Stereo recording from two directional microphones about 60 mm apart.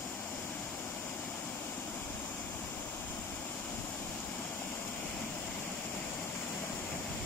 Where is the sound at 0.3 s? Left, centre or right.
Left.